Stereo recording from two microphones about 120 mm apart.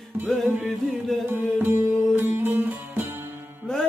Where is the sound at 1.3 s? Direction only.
20° right (ahead or behind).